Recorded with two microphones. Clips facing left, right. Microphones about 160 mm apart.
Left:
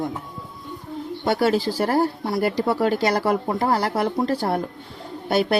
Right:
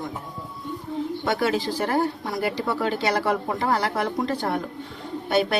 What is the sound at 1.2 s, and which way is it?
Speech, 35° left (ahead or behind).